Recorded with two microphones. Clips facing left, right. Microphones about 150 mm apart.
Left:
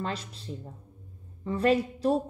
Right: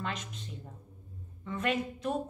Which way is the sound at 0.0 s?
35° left (ahead or behind).